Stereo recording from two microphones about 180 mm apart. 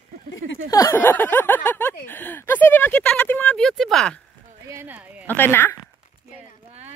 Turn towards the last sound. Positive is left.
turn(degrees=10)  # may be behind; listen again after turning